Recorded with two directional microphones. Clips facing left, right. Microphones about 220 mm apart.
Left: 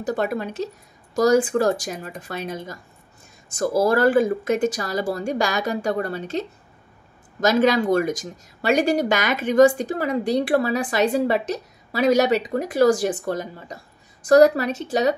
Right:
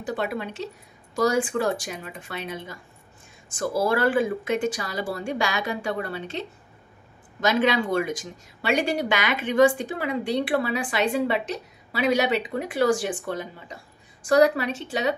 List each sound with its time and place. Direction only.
0.0 s speech: 45° left (ahead or behind)